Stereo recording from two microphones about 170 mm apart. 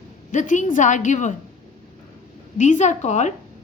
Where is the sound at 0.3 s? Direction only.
45° left (ahead or behind).